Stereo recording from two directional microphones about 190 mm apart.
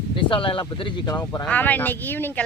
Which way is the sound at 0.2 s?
25° left (ahead or behind).